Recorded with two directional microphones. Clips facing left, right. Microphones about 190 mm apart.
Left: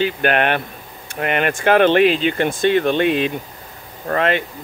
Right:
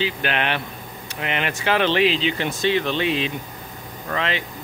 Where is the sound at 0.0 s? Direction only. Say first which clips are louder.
Left 6 dB; 50° left (ahead or behind).